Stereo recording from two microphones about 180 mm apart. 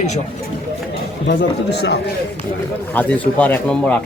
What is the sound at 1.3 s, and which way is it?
Speech, 70° left (ahead or behind).